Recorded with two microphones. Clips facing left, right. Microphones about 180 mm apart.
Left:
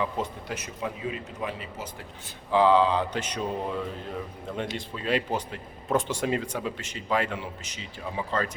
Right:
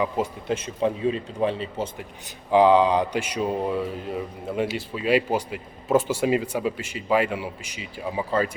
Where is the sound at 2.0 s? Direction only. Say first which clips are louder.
Right 4 dB; 15° right (ahead or behind).